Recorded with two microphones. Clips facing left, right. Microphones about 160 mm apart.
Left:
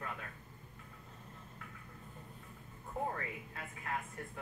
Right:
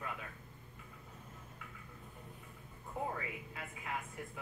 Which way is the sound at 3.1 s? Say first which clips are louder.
Even; 5° right (ahead or behind).